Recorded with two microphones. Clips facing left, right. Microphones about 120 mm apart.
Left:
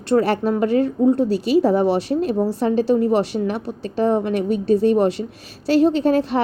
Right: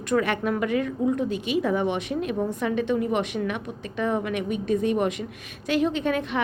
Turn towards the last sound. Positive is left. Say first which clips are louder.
# left 8 dB
turn(degrees=35)  # may be behind; listen again after turning